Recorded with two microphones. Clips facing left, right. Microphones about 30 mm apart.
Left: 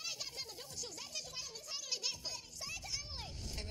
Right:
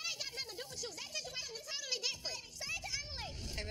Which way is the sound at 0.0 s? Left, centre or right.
Right.